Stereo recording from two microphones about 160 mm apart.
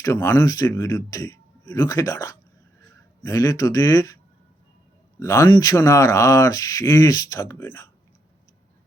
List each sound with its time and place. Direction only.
0.0 s speech: 15° left (ahead or behind)
5.2 s speech: 20° left (ahead or behind)